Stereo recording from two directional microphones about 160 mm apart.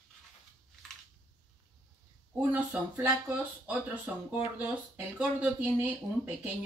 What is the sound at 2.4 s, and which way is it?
Speech, 10° right (ahead or behind).